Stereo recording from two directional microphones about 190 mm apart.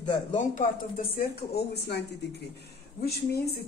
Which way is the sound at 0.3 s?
40° left (ahead or behind).